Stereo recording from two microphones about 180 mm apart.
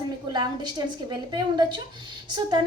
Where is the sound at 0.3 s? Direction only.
25° right (ahead or behind).